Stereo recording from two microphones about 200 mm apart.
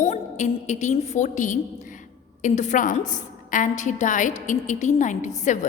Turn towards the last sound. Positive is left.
turn(degrees=35)  # may be behind; listen again after turning